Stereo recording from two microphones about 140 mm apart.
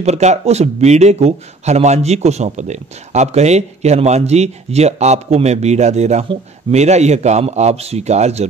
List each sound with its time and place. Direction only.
0.0 s a man's voice: 55° right (ahead or behind)